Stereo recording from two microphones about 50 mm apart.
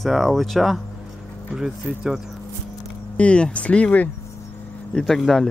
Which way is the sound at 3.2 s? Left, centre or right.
Left.